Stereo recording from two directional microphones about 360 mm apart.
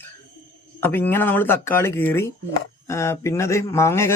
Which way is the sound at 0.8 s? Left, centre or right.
Centre.